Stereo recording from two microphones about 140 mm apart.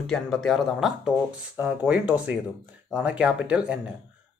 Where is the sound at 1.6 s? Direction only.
10° right (ahead or behind).